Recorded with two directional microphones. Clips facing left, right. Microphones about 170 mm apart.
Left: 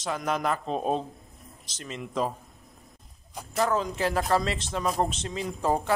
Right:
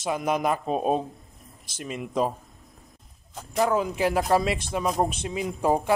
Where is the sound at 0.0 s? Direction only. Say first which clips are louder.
Right 3 dB; 10° right (ahead or behind).